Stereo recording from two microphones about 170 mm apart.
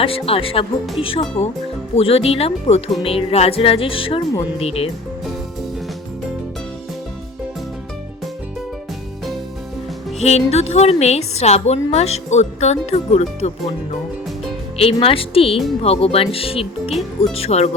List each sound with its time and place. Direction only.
0.0 s a woman's voice: 35° left (ahead or behind)
10.2 s a woman's voice: 40° left (ahead or behind)
16.9 s speech: centre (ahead or behind)
17.3 s a woman's voice: 35° left (ahead or behind)